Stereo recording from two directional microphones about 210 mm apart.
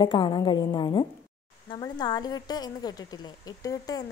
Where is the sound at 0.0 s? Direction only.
20° left (ahead or behind).